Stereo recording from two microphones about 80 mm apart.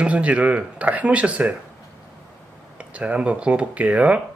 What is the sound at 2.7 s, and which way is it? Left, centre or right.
A man's voice, centre.